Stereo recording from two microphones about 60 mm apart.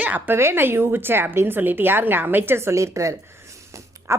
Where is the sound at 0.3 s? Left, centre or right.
Right.